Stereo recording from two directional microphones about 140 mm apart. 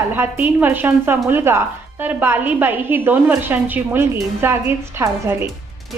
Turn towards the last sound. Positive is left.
turn(degrees=-20)  # may be behind; listen again after turning